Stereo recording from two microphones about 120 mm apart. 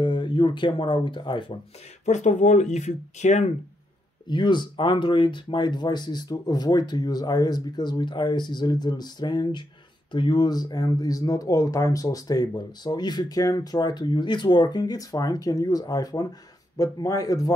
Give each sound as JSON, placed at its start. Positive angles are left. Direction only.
{"t": 0.0, "sound": "speech", "side_deg": 40}
{"t": 2.0, "sound": "speech", "side_deg": 75}
{"t": 4.3, "sound": "speech", "side_deg": 40}